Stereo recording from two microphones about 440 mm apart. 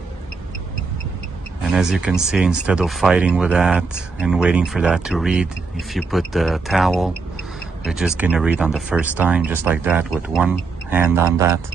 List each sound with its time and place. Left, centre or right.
1.6 s speech: centre